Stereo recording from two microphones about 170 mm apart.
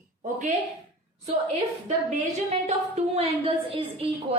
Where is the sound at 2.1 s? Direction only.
45° right (ahead or behind).